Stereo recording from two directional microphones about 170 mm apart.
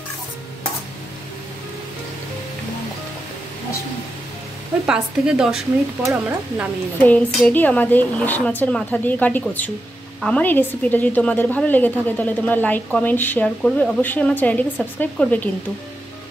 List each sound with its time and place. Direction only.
4.8 s speech: 5° right (ahead or behind)
7.0 s a woman's voice: 10° left (ahead or behind)